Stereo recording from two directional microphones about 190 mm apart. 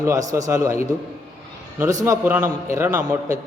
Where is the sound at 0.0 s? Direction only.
15° right (ahead or behind).